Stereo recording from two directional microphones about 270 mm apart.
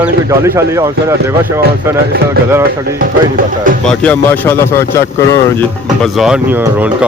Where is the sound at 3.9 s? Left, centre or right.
Centre.